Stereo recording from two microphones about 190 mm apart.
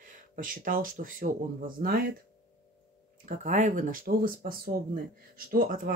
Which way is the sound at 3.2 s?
40° right (ahead or behind).